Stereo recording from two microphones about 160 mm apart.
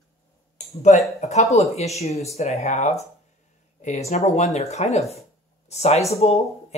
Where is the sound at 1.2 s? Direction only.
45° left (ahead or behind).